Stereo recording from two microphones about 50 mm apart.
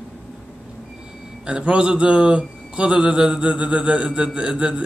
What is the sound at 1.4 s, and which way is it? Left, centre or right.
Speech, right.